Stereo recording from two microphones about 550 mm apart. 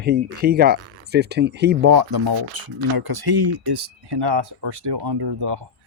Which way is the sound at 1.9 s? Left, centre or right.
Right.